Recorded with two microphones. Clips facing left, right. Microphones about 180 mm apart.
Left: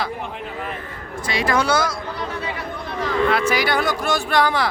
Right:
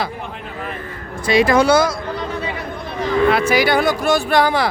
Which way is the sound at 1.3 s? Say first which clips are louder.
Right 7 dB; 10° right (ahead or behind).